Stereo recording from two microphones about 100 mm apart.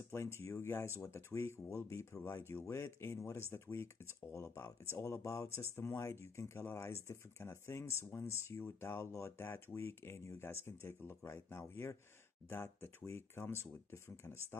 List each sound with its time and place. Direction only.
0.1 s speech: 25° left (ahead or behind)